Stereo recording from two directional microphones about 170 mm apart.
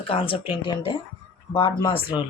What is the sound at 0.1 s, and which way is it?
Speech, 30° left (ahead or behind).